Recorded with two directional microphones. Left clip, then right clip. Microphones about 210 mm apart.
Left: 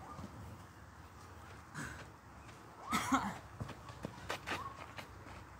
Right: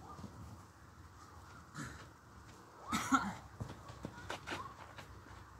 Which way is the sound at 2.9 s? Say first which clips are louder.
Even; 25° left (ahead or behind).